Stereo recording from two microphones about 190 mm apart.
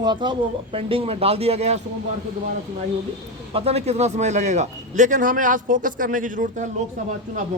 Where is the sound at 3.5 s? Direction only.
35° right (ahead or behind).